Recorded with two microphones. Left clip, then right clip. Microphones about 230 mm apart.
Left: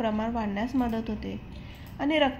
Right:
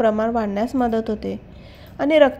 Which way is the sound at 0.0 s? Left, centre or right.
Right.